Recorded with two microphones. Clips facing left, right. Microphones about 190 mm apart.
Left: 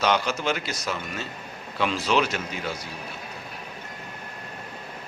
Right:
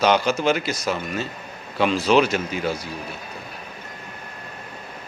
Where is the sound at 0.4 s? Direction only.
5° right (ahead or behind).